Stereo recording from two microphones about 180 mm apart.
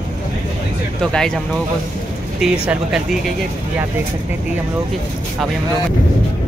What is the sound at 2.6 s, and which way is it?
Speech, 5° right (ahead or behind).